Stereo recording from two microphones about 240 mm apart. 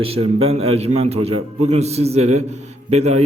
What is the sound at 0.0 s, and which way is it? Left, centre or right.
Speech, right.